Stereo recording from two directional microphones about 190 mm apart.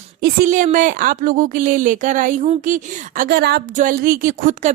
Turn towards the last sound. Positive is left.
turn(degrees=-40)  # may be behind; listen again after turning